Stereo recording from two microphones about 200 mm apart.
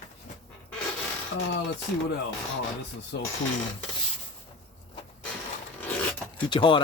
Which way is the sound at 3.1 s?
55° left (ahead or behind).